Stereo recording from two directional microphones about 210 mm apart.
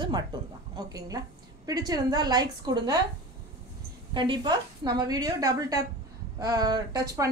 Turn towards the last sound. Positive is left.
turn(degrees=-20)  # may be behind; listen again after turning